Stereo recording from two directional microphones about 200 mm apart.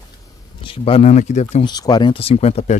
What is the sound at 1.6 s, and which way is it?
Speech, 20° left (ahead or behind).